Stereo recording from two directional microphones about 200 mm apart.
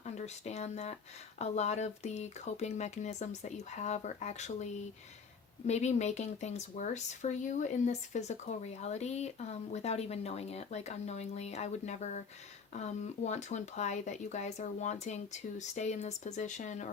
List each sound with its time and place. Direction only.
0.0 s speech: 35° left (ahead or behind)